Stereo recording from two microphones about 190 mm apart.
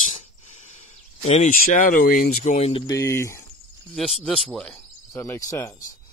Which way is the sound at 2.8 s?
15° left (ahead or behind).